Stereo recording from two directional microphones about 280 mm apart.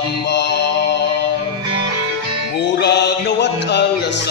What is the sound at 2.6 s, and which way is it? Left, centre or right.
Speech, left.